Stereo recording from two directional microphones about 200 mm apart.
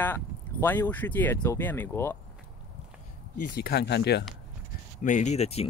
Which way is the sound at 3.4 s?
50° left (ahead or behind).